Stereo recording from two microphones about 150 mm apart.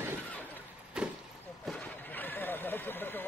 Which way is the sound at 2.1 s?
10° left (ahead or behind).